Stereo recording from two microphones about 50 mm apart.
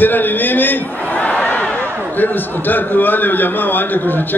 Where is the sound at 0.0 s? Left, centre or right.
Left.